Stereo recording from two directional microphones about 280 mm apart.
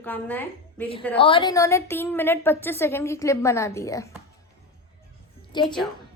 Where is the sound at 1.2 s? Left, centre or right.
Centre.